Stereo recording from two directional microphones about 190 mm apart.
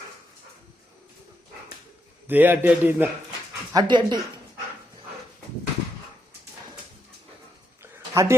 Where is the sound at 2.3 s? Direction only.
10° right (ahead or behind).